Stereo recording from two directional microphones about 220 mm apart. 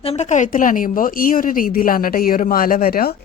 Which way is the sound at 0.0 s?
30° left (ahead or behind).